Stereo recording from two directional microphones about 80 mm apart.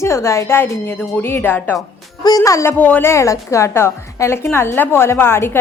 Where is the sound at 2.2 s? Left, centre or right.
Left.